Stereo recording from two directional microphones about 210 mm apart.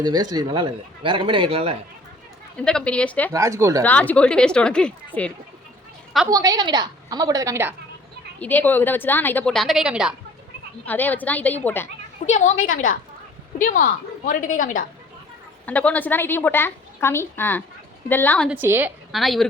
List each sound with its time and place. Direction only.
0.0 s speech: 20° right (ahead or behind)
2.6 s a woman's voice: 5° left (ahead or behind)
3.3 s a woman's voice: 15° right (ahead or behind)
3.8 s a woman's voice: 5° left (ahead or behind)
6.3 s a woman's voice: 15° right (ahead or behind)
8.4 s a woman's voice: 10° left (ahead or behind)
10.8 s a woman's voice: 10° left (ahead or behind)
12.2 s a woman's voice: 35° left (ahead or behind)
15.6 s a woman's voice: 5° left (ahead or behind)
18.4 s a woman's voice: 10° right (ahead or behind)
19.1 s a woman's voice: centre (ahead or behind)